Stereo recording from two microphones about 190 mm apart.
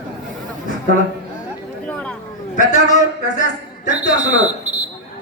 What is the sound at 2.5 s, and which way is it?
A man's voice, 40° left (ahead or behind).